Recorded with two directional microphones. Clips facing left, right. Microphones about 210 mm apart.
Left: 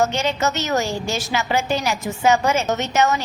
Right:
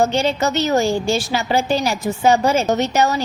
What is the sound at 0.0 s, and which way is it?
A woman's voice, 30° right (ahead or behind).